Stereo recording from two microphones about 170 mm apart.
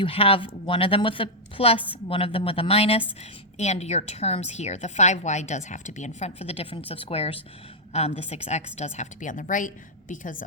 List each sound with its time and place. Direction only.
0.0 s a woman's voice: 35° left (ahead or behind); by 10.4 s 50° left (ahead or behind)